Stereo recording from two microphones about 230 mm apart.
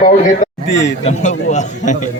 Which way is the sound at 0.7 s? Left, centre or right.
Left.